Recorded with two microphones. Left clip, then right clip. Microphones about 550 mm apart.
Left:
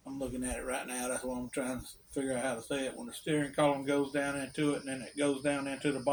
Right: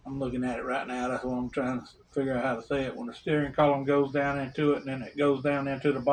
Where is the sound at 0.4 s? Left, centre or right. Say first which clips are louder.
Right 7 dB; left.